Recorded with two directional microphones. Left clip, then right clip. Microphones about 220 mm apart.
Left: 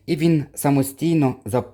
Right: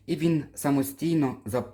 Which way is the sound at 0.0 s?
45° left (ahead or behind).